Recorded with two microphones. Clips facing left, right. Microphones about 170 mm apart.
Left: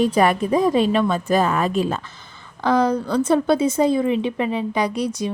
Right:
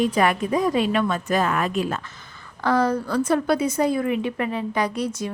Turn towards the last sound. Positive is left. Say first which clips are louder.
# left 2 dB
turn(degrees=15)  # may be behind; listen again after turning